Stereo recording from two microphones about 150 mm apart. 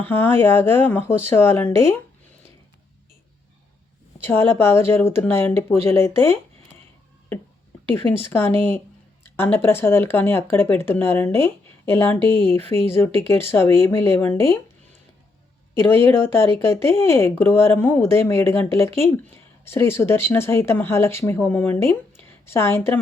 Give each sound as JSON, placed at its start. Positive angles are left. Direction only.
{"t": 0.0, "sound": "speech", "side_deg": 15}
{"t": 4.2, "sound": "speech", "side_deg": 15}
{"t": 7.9, "sound": "speech", "side_deg": 15}
{"t": 15.9, "sound": "a woman's voice", "side_deg": 15}